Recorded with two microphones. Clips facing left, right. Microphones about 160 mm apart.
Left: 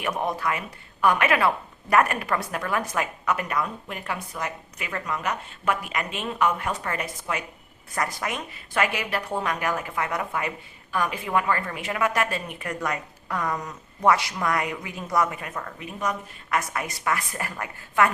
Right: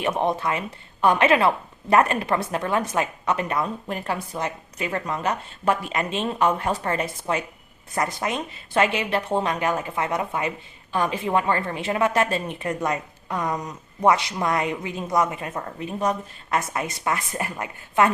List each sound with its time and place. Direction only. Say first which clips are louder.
0.0 s a woman's voice: right 4 dB; 25° right (ahead or behind)